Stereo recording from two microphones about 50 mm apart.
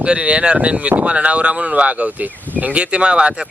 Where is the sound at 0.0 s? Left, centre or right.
Right.